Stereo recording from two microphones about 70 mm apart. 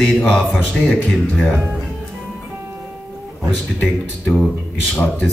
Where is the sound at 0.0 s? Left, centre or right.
Centre.